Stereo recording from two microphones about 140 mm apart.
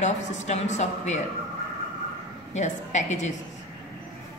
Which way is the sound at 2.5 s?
55° left (ahead or behind).